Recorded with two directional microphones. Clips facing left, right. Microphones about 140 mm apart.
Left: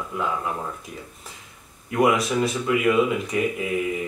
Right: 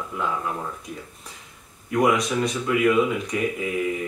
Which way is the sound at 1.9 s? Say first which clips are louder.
Left 1 dB; 5° left (ahead or behind).